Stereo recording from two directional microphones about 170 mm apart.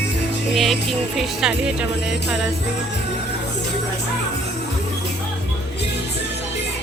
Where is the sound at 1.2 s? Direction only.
Centre (ahead or behind).